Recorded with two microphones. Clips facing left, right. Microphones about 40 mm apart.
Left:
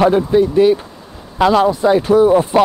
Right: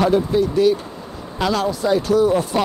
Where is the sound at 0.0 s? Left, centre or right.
Left.